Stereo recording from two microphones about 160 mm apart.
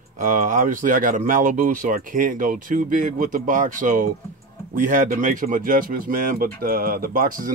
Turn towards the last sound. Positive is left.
turn(degrees=-60)  # may be behind; listen again after turning